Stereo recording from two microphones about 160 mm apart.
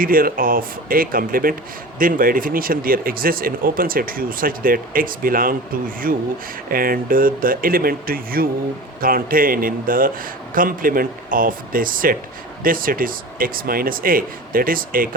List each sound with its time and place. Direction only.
0.0 s speech: 65° right (ahead or behind)